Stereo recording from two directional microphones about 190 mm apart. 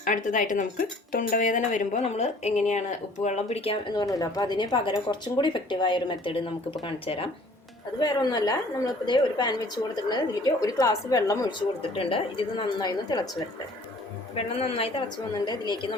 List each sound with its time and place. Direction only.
0.0 s speech: 45° left (ahead or behind)
4.0 s a woman's voice: 20° left (ahead or behind)
14.3 s a woman's voice: 30° left (ahead or behind)